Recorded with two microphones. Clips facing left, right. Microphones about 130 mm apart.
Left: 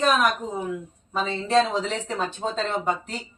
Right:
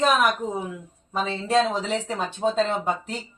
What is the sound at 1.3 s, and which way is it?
Speech, centre (ahead or behind).